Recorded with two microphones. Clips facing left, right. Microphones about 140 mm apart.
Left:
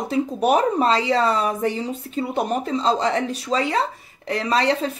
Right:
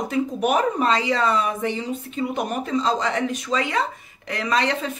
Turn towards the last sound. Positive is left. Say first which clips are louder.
# left 2 dB
turn(degrees=35)  # may be behind; listen again after turning